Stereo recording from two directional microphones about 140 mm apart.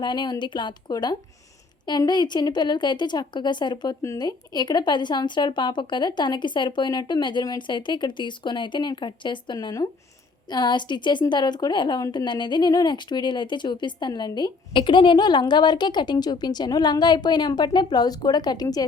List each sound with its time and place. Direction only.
0.0 s a woman's voice: 30° left (ahead or behind)